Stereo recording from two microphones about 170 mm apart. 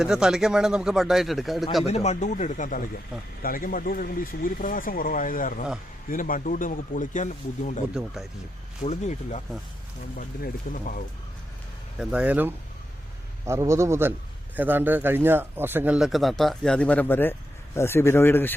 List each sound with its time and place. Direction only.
0.0 s speech: 5° right (ahead or behind)
1.9 s speech: 40° left (ahead or behind)
7.9 s speech: centre (ahead or behind)
8.8 s speech: 40° left (ahead or behind)
10.2 s speech: 55° left (ahead or behind)
11.9 s speech: 5° right (ahead or behind); by 18.5 s 10° left (ahead or behind)